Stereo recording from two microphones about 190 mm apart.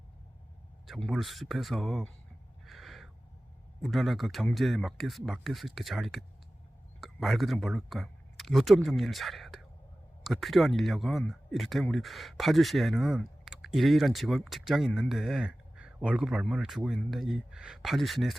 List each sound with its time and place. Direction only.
0.9 s speech: centre (ahead or behind)
2.6 s owl: centre (ahead or behind)
3.8 s speech: centre (ahead or behind)